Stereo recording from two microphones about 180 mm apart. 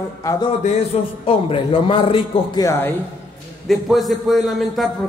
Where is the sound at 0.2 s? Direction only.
20° left (ahead or behind).